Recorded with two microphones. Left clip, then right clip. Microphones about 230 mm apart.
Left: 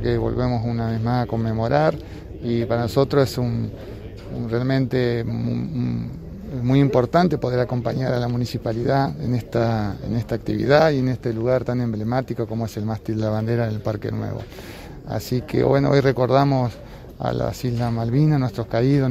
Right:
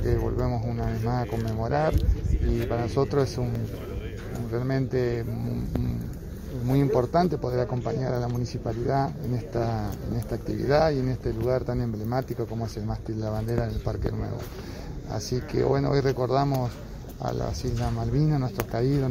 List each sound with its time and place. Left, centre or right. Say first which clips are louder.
0.0 s speech: left 6 dB; left
4.5 s speech: left 6 dB; left
6.7 s speech: left 5 dB; left